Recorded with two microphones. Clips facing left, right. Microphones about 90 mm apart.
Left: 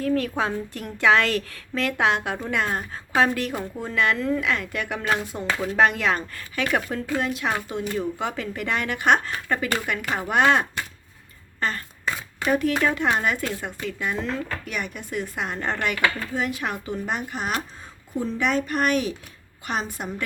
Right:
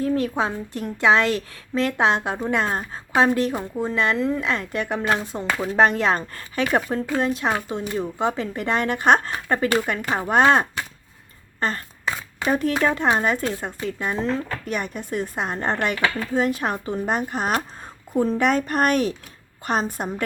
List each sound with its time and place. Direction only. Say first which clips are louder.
0.0 s a woman's voice: right 2 dB; 25° right (ahead or behind); by 20.2 s 40° right (ahead or behind)